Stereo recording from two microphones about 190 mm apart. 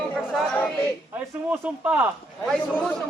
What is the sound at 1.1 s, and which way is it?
Speech, 10° right (ahead or behind).